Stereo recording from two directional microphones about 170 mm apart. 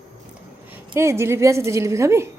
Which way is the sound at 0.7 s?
15° right (ahead or behind).